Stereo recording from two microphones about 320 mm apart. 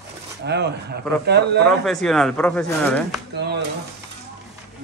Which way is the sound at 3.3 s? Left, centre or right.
Right.